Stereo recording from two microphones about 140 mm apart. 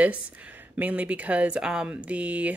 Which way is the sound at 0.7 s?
10° right (ahead or behind).